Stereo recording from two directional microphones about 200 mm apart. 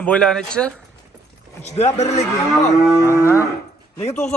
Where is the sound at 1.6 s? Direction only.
35° left (ahead or behind).